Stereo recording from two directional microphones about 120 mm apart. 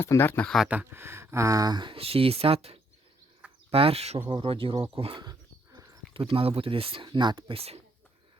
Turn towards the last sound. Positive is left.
turn(degrees=-55)  # may be behind; listen again after turning